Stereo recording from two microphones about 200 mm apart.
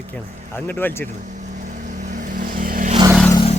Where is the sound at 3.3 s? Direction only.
25° left (ahead or behind).